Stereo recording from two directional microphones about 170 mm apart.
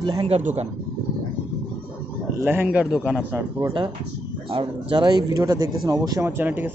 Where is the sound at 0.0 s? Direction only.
25° right (ahead or behind).